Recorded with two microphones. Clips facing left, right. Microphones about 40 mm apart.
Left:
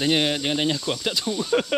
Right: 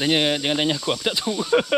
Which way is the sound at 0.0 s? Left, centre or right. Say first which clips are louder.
Right 1 dB; centre.